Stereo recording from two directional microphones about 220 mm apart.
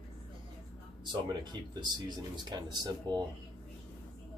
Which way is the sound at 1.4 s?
20° right (ahead or behind).